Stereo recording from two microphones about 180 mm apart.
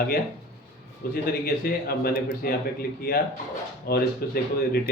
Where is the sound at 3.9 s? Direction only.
55° left (ahead or behind).